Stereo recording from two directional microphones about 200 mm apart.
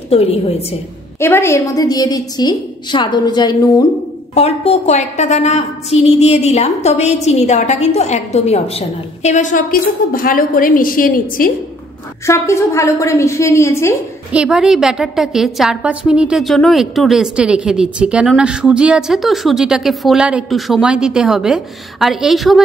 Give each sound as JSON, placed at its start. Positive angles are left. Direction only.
{"t": 0.1, "sound": "a woman's voice", "side_deg": 30}
{"t": 1.2, "sound": "a woman's voice", "side_deg": 15}
{"t": 4.4, "sound": "a woman's voice", "side_deg": 30}
{"t": 12.3, "sound": "a woman's voice", "side_deg": 15}
{"t": 14.3, "sound": "a woman's voice", "side_deg": -5}